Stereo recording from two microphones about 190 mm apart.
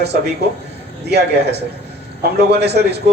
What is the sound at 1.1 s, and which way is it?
Speech, 60° right (ahead or behind).